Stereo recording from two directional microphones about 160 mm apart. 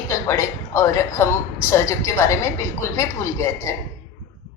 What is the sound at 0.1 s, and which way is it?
Speech, 20° left (ahead or behind).